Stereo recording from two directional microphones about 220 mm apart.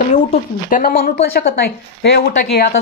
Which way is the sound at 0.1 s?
35° left (ahead or behind).